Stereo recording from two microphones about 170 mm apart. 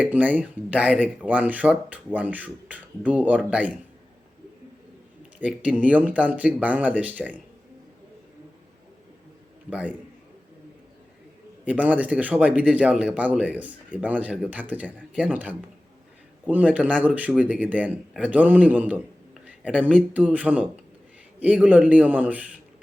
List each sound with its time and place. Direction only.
0.0 s a man's voice: 10° right (ahead or behind)
5.4 s a man's voice: 10° right (ahead or behind)
9.6 s a man's voice: 10° right (ahead or behind)
11.6 s a man's voice: 10° right (ahead or behind)